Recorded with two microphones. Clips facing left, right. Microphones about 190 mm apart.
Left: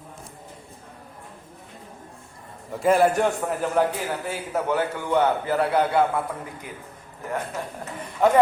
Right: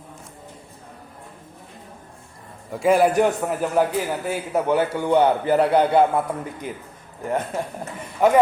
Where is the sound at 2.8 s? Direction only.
Centre (ahead or behind).